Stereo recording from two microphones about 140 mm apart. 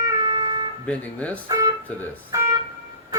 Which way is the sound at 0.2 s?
30° right (ahead or behind).